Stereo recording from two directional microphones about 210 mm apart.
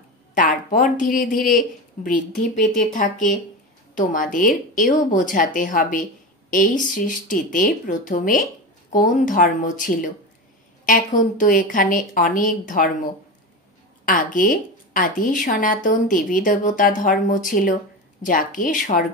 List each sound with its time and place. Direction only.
0.3 s a sound: 40° left (ahead or behind)
1.2 s speech: 40° left (ahead or behind)
14.0 s speech: 40° left (ahead or behind)